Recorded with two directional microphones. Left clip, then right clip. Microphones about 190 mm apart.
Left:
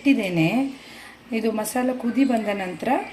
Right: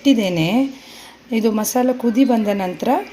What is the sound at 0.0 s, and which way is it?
A woman's voice, 45° right (ahead or behind).